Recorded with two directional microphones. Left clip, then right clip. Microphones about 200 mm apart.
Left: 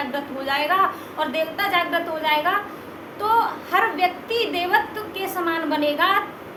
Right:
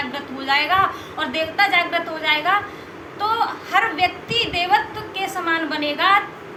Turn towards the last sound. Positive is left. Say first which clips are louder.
# right 2 dB
turn(degrees=25)  # may be behind; listen again after turning